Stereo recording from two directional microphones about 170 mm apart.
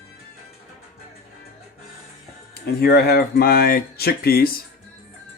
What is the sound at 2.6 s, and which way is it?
Speech, 65° left (ahead or behind).